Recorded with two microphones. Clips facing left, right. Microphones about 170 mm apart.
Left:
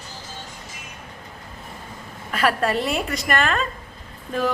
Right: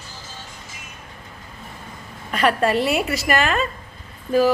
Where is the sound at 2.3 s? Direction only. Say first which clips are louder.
Right 3 dB; centre (ahead or behind).